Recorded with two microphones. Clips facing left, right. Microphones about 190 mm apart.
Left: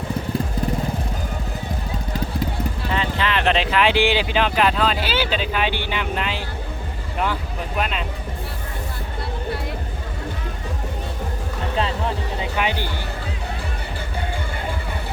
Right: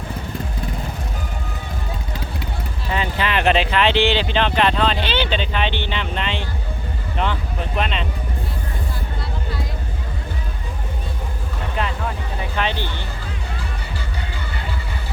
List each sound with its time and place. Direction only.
2.9 s speech: 10° right (ahead or behind); by 6.4 s 5° left (ahead or behind)
7.8 s speech: 5° left (ahead or behind)
11.8 s vehicle: 25° left (ahead or behind)
12.5 s music: 10° left (ahead or behind)